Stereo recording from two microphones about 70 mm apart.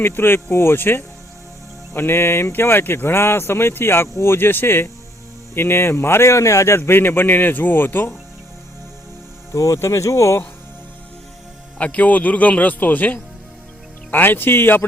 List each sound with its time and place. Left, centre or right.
0.0 s speech: left
9.5 s speech: left
11.8 s speech: left